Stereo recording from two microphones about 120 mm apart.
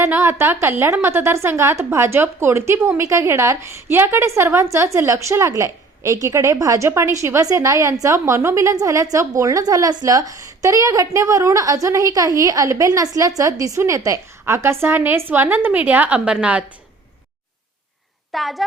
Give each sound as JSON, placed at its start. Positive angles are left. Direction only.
{"t": 0.0, "sound": "a woman's voice", "side_deg": -20}
{"t": 18.3, "sound": "a woman's voice", "side_deg": 0}